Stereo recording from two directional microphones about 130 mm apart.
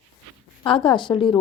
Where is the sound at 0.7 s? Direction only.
40° left (ahead or behind).